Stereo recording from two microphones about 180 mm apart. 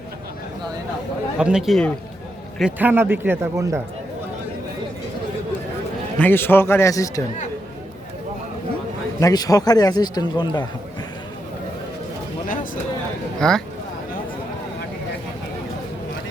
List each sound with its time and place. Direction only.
1.4 s a man's voice: 5° right (ahead or behind)
6.1 s a man's voice: 10° left (ahead or behind)
9.2 s a man's voice: 20° left (ahead or behind)
13.4 s speech: 5° left (ahead or behind)